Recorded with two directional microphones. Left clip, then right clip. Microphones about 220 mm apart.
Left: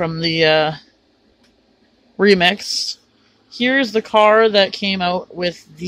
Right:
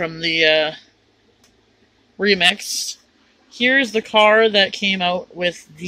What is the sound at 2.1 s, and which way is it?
Speech, 30° left (ahead or behind).